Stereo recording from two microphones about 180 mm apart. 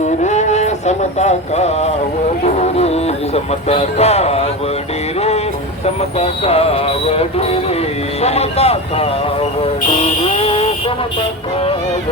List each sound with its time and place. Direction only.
0.2 s speech: 40° left (ahead or behind)
2.4 s music: 35° left (ahead or behind)
5.8 s music: 35° left (ahead or behind)
10.2 s vehicle: 35° left (ahead or behind)